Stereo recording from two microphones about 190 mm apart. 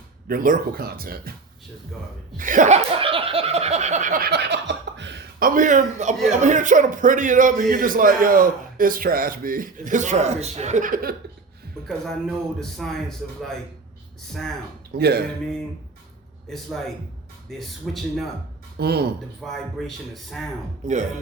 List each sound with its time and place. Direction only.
0.3 s a man's voice: 50° right (ahead or behind)
2.4 s laughter: 45° right (ahead or behind)
6.4 s a man's voice: 40° right (ahead or behind)
11.9 s a man's voice: centre (ahead or behind)
14.9 s speech: 55° right (ahead or behind)
16.5 s a man's voice: centre (ahead or behind)
18.8 s speech: 55° right (ahead or behind)
19.4 s a man's voice: centre (ahead or behind)
20.8 s speech: 40° right (ahead or behind)